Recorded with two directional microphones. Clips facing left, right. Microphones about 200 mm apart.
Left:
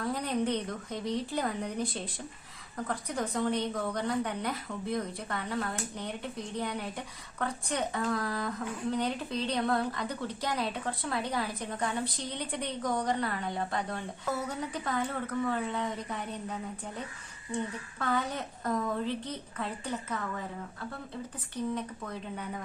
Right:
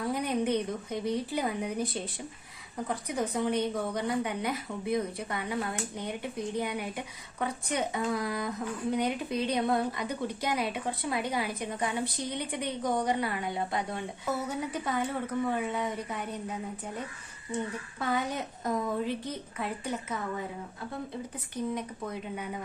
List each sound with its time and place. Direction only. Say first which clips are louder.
0.0 s a woman's voice: right 1 dB; 10° right (ahead or behind)
2.7 s a woman's voice: right 2 dB; 15° right (ahead or behind)
18.0 s a woman's voice: right 1 dB; 10° right (ahead or behind)
21.8 s a woman's voice: right 2 dB; 15° right (ahead or behind)